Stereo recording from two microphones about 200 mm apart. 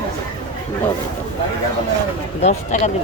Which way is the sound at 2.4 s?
35° left (ahead or behind).